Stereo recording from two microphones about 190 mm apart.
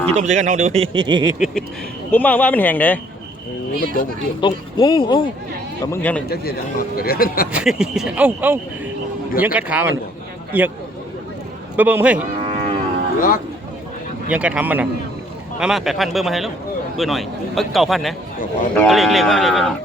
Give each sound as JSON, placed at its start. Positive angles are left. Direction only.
{"t": 0.1, "sound": "speech", "side_deg": -40}
{"t": 2.0, "sound": "speech", "side_deg": 10}
{"t": 4.4, "sound": "speech", "side_deg": 25}
{"t": 5.8, "sound": "speech", "side_deg": 10}
{"t": 6.3, "sound": "speech", "side_deg": 55}
{"t": 7.5, "sound": "a man's voice", "side_deg": -5}
{"t": 11.8, "sound": "speech", "side_deg": -10}
{"t": 12.4, "sound": "cattle", "side_deg": -30}
{"t": 13.1, "sound": "speech", "side_deg": 45}
{"t": 14.3, "sound": "a man's voice", "side_deg": -5}